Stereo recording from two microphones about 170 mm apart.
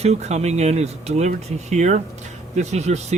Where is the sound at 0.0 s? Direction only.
40° right (ahead or behind).